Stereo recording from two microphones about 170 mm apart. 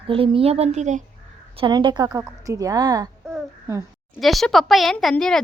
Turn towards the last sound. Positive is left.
turn(degrees=5)  # may be behind; listen again after turning